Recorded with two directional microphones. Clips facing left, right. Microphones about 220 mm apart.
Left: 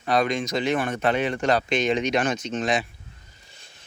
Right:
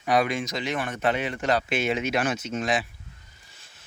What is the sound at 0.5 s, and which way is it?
Speech, 50° left (ahead or behind).